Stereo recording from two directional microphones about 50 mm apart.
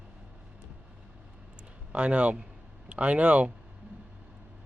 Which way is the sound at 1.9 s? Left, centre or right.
Right.